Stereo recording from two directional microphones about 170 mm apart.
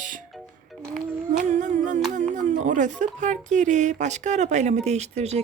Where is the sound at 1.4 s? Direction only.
45° right (ahead or behind).